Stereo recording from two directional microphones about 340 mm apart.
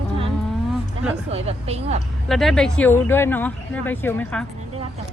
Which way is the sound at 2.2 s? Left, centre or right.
Centre.